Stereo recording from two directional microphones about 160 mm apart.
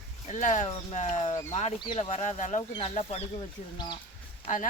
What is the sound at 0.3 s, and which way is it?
Speech, 50° left (ahead or behind).